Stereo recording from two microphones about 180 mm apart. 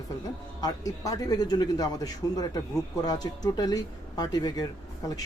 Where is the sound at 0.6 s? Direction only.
20° left (ahead or behind).